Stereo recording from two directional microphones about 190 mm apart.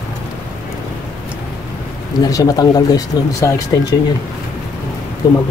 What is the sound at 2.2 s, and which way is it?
Speech, 20° left (ahead or behind).